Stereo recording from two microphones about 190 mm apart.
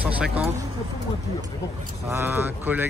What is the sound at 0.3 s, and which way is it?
Speech, 35° right (ahead or behind).